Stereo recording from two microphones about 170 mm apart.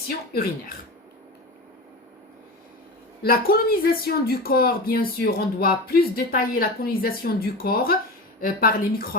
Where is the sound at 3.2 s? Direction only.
60° left (ahead or behind).